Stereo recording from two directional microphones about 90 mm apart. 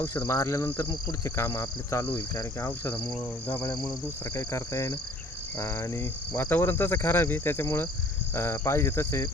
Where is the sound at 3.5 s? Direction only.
25° left (ahead or behind).